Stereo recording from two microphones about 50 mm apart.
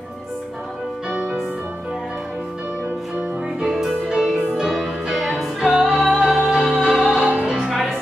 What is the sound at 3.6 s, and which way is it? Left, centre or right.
Music, centre.